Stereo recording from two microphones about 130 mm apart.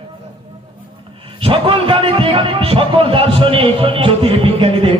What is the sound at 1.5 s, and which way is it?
A man's voice, 45° right (ahead or behind).